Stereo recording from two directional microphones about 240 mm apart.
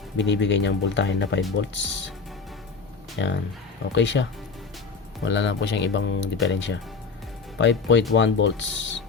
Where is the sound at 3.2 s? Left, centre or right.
Left.